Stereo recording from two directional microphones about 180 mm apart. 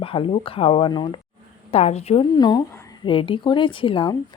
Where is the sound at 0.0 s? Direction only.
30° left (ahead or behind).